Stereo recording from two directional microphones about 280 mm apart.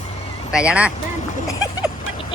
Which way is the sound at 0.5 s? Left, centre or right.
Centre.